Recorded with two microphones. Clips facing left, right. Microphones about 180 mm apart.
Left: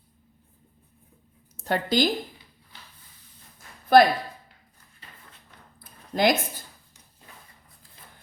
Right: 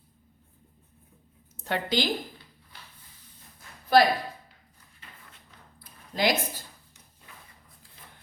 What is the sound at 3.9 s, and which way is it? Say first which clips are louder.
Speech: left 4 dB; 50° left (ahead or behind).